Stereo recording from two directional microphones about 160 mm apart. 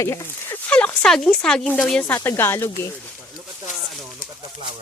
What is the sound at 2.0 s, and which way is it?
Speech, 15° left (ahead or behind).